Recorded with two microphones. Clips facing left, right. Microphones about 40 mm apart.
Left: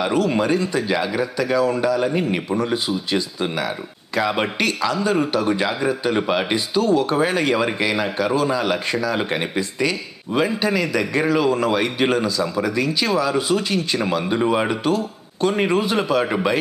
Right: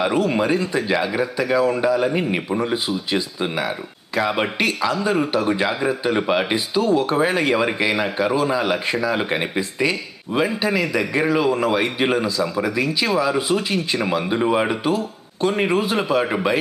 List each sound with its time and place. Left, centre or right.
0.0 s speech: centre